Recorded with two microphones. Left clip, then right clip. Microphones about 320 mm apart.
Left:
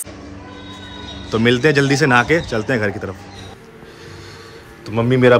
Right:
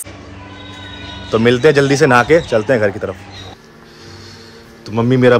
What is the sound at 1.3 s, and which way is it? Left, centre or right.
Speech, centre.